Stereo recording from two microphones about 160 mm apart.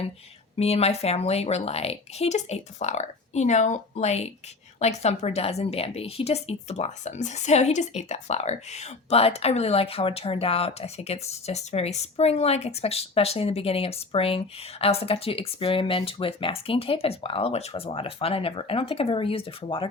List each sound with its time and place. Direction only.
0.5 s a woman's voice: 40° left (ahead or behind)